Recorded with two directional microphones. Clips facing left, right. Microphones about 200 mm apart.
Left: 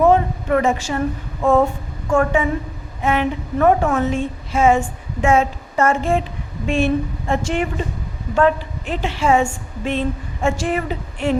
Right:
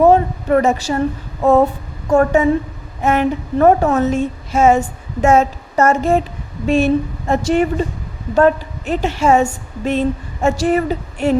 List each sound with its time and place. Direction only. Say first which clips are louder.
0.0 s a woman's voice: right 3 dB; 35° right (ahead or behind)